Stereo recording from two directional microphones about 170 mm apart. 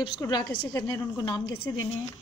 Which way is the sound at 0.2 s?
25° left (ahead or behind).